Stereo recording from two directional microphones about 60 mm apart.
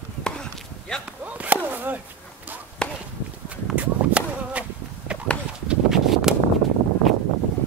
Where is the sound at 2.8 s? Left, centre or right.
Centre.